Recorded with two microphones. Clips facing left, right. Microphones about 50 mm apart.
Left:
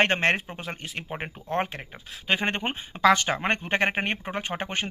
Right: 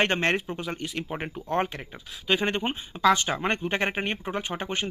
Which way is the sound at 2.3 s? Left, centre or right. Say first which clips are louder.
Right 1 dB; left.